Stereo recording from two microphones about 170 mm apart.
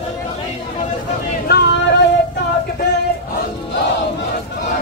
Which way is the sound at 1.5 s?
80° left.